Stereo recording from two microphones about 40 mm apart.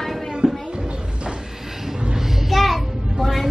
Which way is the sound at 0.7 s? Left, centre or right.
Right.